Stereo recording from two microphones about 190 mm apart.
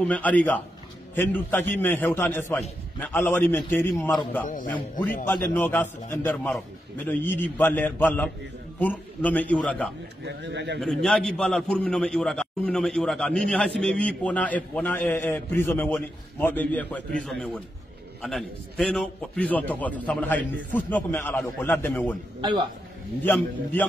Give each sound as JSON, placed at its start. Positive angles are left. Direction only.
{"t": 0.0, "sound": "a man's voice", "side_deg": 10}
{"t": 5.2, "sound": "a man's voice", "side_deg": 10}
{"t": 10.2, "sound": "speech", "side_deg": -65}
{"t": 10.8, "sound": "a man's voice", "side_deg": 5}
{"t": 22.4, "sound": "a man's voice", "side_deg": -25}
{"t": 23.2, "sound": "a man's voice", "side_deg": 10}